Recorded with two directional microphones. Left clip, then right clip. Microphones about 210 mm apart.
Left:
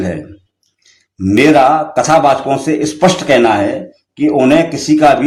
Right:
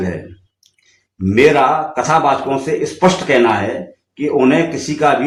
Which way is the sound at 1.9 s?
50° left (ahead or behind).